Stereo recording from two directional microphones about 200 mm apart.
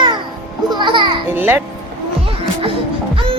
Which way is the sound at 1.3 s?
10° right (ahead or behind).